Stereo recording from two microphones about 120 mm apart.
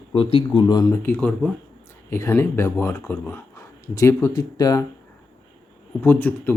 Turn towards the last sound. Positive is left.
turn(degrees=15)  # may be behind; listen again after turning